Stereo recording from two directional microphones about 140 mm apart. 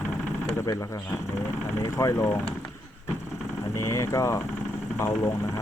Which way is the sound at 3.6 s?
20° left (ahead or behind).